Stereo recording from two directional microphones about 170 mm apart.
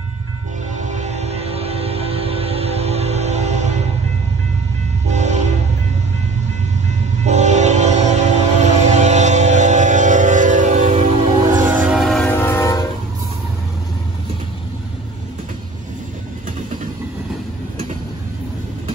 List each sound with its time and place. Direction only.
0.9 s music: 40° right (ahead or behind)
5.1 s train: 45° right (ahead or behind)
7.2 s train: 45° right (ahead or behind)
9.0 s vehicle: 45° right (ahead or behind)
11.8 s music: centre (ahead or behind); by 12.7 s 15° left (ahead or behind)